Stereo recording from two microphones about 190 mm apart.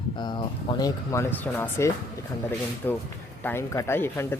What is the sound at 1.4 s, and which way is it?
Speech, 10° left (ahead or behind).